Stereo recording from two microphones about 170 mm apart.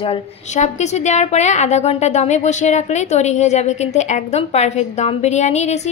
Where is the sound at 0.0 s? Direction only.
40° left (ahead or behind).